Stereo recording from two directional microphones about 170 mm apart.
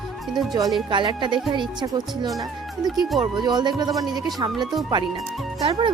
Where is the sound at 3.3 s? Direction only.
25° right (ahead or behind).